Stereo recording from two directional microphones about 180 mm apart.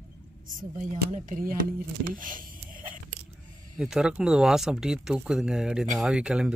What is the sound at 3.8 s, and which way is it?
Speech, 5° right (ahead or behind).